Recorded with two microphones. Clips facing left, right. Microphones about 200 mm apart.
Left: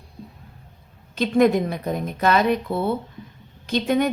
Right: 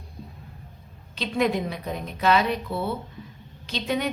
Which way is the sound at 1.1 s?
50° left (ahead or behind).